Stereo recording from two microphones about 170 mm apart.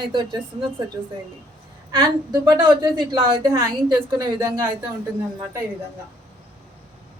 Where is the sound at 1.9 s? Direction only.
25° right (ahead or behind).